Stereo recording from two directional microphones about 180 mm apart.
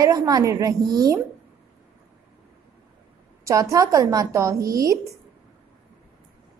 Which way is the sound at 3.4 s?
15° right (ahead or behind).